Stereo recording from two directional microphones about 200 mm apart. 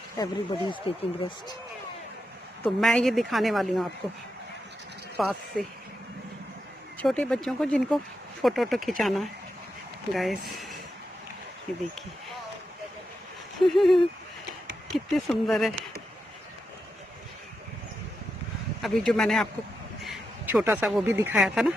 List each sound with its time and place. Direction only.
0.2 s speech: 25° left (ahead or behind)
2.6 s a woman's voice: centre (ahead or behind)
5.1 s a woman's voice: centre (ahead or behind)
7.0 s a woman's voice: 5° left (ahead or behind)
13.7 s a woman's voice: centre (ahead or behind)
18.8 s a woman's voice: centre (ahead or behind)